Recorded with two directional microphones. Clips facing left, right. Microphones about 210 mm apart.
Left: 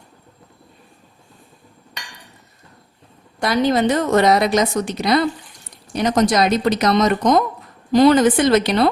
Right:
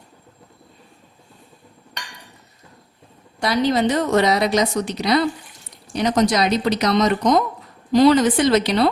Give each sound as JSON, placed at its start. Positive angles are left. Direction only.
{"t": 3.4, "sound": "a woman's voice", "side_deg": 55}